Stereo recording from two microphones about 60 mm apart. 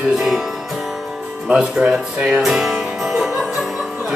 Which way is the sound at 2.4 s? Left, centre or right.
Centre.